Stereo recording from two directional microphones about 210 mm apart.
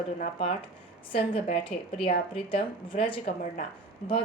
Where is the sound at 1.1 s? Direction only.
30° left (ahead or behind).